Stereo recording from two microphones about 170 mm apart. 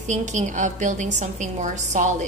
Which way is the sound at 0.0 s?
45° right (ahead or behind).